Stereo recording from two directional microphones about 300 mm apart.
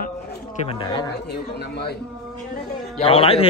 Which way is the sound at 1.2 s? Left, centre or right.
Left.